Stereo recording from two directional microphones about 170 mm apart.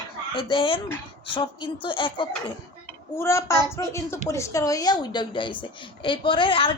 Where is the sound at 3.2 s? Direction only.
15° left (ahead or behind).